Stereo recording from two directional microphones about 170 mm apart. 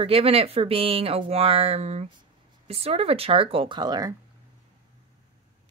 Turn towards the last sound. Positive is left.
turn(degrees=-20)  # may be behind; listen again after turning